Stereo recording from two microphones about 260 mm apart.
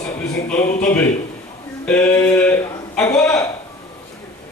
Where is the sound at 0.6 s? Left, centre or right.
Left.